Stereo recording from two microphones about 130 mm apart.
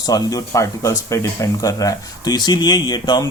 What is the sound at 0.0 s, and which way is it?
Speech, 30° left (ahead or behind).